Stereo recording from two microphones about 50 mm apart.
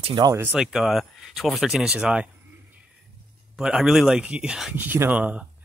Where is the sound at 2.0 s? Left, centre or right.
Right.